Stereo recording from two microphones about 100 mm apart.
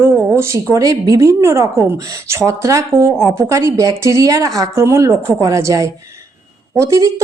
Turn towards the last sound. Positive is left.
turn(degrees=-35)  # may be behind; listen again after turning